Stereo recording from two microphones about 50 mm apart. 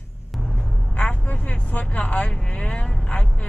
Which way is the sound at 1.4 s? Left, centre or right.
Left.